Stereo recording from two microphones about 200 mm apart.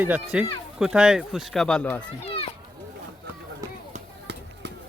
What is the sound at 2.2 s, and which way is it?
Children playing, 30° left (ahead or behind).